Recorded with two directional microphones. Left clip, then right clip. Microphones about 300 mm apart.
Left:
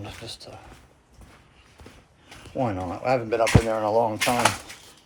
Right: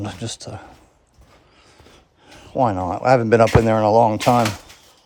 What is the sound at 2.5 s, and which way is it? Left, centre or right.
Speech, right.